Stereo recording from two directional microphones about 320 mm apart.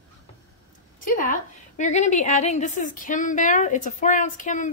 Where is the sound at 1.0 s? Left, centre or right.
Left.